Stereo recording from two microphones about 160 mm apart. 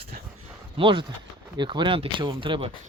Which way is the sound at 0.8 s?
30° right (ahead or behind).